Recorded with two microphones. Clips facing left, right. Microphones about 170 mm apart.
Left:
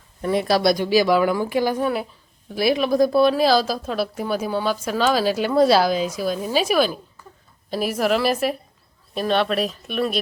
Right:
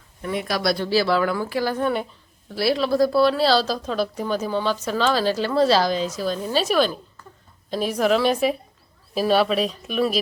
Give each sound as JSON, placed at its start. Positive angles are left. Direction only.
{"t": 0.2, "sound": "speech", "side_deg": 35}
{"t": 0.7, "sound": "a woman's voice", "side_deg": 15}